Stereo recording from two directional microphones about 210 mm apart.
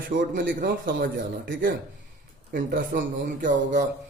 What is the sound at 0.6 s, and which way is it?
A man's voice, 40° right (ahead or behind).